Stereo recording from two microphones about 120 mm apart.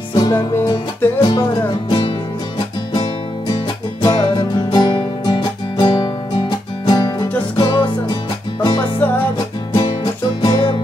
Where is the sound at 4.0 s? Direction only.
40° left (ahead or behind).